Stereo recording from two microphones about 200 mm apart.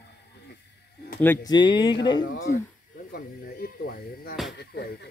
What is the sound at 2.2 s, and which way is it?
Speech, 75° left (ahead or behind).